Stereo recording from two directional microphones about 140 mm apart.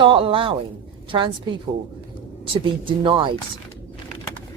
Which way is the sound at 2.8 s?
35° right (ahead or behind).